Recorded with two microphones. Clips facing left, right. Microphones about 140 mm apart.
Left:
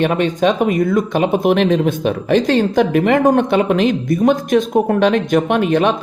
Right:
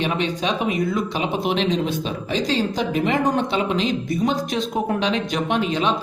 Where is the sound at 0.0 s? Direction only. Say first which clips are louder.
Left 8 dB; 50° left (ahead or behind).